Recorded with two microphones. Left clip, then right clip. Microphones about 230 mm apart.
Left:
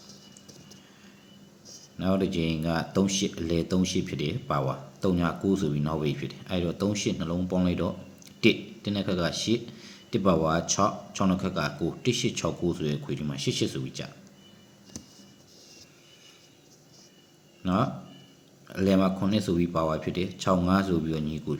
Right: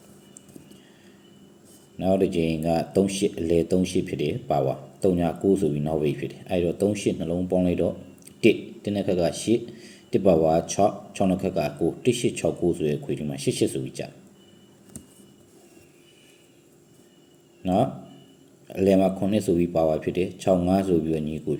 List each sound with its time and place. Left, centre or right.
2.3 s speech: centre
17.6 s speech: centre